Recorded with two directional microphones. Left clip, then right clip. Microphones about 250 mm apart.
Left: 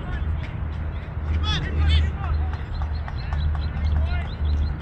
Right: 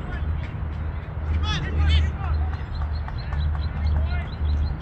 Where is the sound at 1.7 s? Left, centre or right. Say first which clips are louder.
Even; centre.